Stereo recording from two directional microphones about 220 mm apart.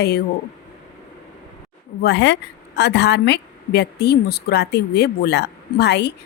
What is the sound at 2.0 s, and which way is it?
A woman's voice, 50° left (ahead or behind).